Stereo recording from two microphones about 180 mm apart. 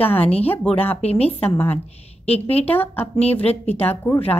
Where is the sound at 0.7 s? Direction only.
5° left (ahead or behind).